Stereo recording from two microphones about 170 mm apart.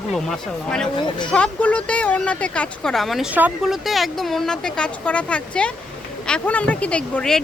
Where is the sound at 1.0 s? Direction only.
25° left (ahead or behind).